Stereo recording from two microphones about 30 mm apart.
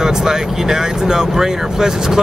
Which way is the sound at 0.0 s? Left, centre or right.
Right.